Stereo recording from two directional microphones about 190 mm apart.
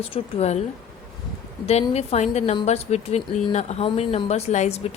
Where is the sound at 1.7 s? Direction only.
35° left (ahead or behind).